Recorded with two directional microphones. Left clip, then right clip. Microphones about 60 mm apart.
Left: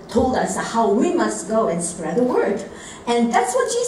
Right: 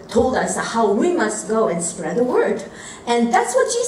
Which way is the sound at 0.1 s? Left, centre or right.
Right.